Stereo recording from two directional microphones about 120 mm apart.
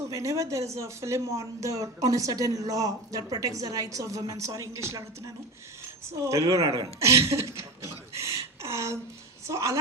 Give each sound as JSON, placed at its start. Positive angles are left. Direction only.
{"t": 0.1, "sound": "speech", "side_deg": -25}
{"t": 8.6, "sound": "speech", "side_deg": -25}